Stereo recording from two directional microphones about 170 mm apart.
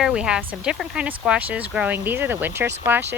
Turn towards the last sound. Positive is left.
turn(degrees=-10)  # may be behind; listen again after turning